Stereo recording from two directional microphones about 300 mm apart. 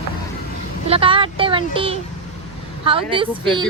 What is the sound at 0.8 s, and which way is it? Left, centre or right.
Speech, centre.